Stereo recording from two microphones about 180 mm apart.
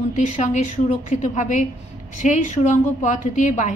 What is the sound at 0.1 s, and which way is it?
A woman's voice, 40° left (ahead or behind).